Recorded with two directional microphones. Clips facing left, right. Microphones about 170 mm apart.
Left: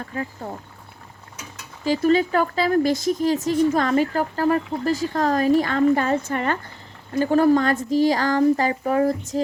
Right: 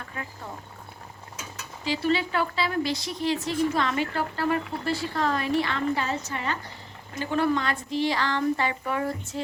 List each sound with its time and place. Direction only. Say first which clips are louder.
1.8 s speech: left 7 dB; 45° left (ahead or behind)